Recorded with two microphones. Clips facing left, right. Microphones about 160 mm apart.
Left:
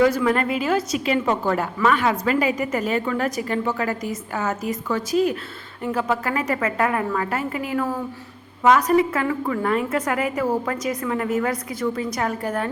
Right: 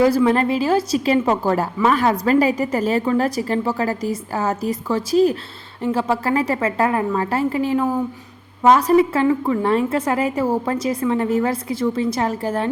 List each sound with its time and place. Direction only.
0.0 s a woman's voice: 30° right (ahead or behind)